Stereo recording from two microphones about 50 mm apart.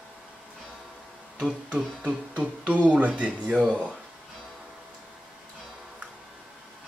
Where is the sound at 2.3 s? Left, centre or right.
Right.